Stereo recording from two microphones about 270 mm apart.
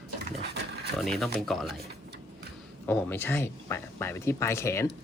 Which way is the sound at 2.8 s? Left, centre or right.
Centre.